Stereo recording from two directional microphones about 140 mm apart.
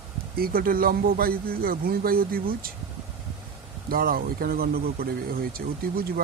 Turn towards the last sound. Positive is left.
turn(degrees=-90)